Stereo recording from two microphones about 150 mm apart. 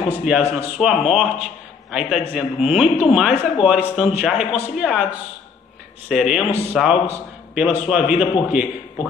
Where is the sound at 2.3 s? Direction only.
5° right (ahead or behind).